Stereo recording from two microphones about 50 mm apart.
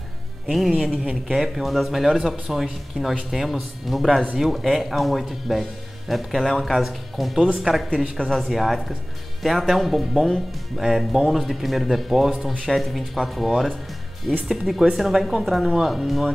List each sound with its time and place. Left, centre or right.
0.5 s speech: centre
14.3 s speech: centre
14.9 s speech: centre